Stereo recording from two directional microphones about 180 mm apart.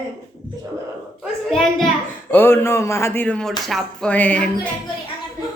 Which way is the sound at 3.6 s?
Centre (ahead or behind).